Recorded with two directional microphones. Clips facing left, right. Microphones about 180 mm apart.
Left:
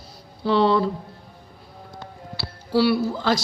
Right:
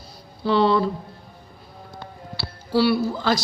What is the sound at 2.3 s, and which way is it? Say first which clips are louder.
Speech: even; 15° left (ahead or behind).